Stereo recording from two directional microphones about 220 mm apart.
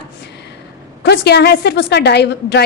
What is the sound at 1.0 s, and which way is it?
A woman's voice, 50° left (ahead or behind).